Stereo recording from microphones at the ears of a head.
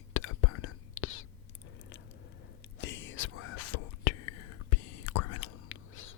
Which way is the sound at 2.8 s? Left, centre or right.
Left.